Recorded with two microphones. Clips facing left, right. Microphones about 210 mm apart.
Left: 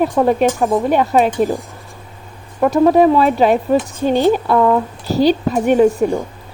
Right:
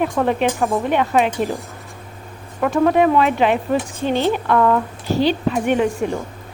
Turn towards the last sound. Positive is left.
turn(degrees=40)  # may be behind; listen again after turning